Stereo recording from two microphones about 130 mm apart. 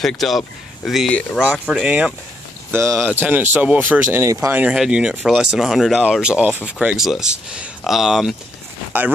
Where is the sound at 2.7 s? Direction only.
20° right (ahead or behind).